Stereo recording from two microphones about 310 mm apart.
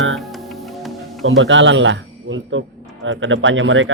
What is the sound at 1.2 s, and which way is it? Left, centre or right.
Speech, right.